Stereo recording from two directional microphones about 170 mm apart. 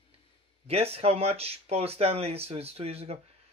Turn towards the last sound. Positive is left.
turn(degrees=-35)  # may be behind; listen again after turning